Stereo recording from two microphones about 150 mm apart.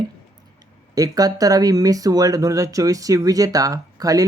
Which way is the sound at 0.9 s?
25° right (ahead or behind).